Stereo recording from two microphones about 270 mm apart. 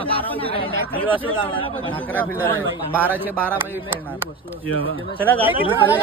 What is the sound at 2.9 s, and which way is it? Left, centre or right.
Speech, centre.